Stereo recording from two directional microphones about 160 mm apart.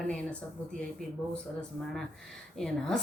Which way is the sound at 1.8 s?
Centre (ahead or behind).